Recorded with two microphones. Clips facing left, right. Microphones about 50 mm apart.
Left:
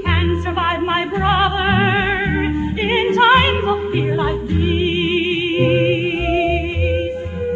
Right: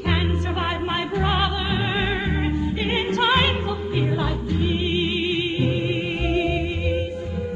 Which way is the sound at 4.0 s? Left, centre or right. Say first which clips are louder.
Left 6 dB; left.